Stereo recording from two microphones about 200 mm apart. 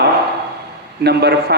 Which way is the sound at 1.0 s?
55° right (ahead or behind).